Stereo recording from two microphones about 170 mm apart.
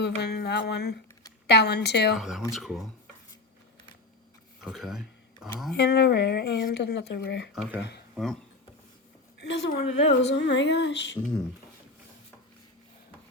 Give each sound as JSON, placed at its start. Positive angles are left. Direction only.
{"t": 0.0, "sound": "a sound", "side_deg": 75}
{"t": 2.1, "sound": "speech", "side_deg": 0}
{"t": 4.6, "sound": "a sound", "side_deg": 0}
{"t": 5.7, "sound": "speech", "side_deg": 85}
{"t": 7.5, "sound": "speech", "side_deg": -5}
{"t": 9.4, "sound": "female singing", "side_deg": 90}
{"t": 9.8, "sound": "speech", "side_deg": 40}
{"t": 10.2, "sound": "female singing", "side_deg": 90}